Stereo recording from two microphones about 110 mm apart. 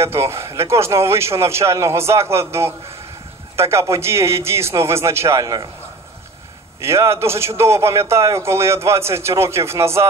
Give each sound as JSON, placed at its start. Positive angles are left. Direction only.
{"t": 0.0, "sound": "a man's voice", "side_deg": -25}
{"t": 6.8, "sound": "a man's voice", "side_deg": -25}